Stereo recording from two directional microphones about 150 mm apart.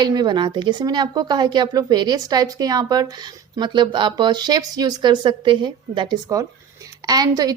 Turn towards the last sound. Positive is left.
turn(degrees=-25)  # may be behind; listen again after turning